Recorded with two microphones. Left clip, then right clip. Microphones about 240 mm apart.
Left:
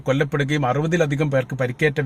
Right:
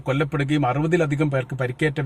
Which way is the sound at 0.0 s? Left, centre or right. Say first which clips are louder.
Left 3 dB; centre.